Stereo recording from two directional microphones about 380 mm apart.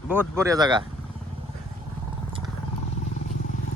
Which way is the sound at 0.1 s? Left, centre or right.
Centre.